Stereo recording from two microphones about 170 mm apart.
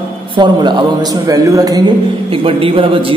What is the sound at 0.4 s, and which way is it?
A man's voice, 25° right (ahead or behind).